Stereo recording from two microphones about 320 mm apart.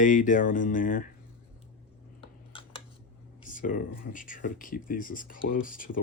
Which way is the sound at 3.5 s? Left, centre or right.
Left.